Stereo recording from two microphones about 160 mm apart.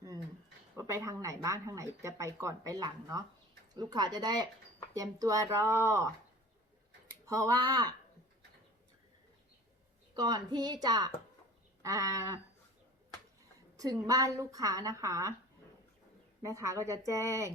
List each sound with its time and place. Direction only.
0.8 s speech: 20° right (ahead or behind)
7.3 s speech: 20° right (ahead or behind)
10.2 s speech: 25° right (ahead or behind)
13.7 s speech: 20° right (ahead or behind)
16.4 s speech: 20° right (ahead or behind)